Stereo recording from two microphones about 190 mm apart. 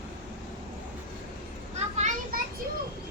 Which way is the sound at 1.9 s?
40° right (ahead or behind).